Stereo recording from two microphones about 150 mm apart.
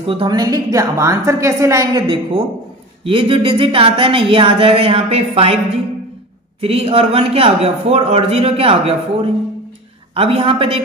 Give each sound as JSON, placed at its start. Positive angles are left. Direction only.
{"t": 0.0, "sound": "a woman's voice", "side_deg": -35}
{"t": 6.6, "sound": "a man's voice", "side_deg": -40}